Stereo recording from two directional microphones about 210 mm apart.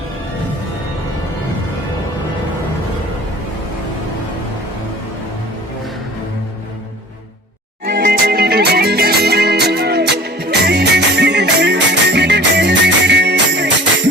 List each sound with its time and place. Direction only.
7.9 s music: 45° right (ahead or behind)